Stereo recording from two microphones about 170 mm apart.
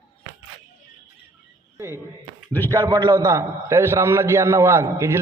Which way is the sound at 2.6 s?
20° right (ahead or behind).